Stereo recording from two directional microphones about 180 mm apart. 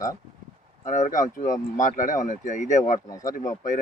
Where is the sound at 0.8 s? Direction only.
45° left (ahead or behind).